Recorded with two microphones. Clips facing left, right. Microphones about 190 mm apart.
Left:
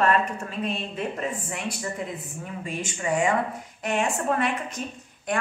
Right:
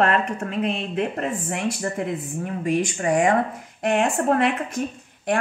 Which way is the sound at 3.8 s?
55° right (ahead or behind).